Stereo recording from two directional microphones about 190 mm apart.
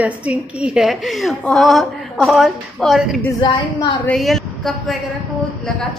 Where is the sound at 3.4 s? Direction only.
25° left (ahead or behind).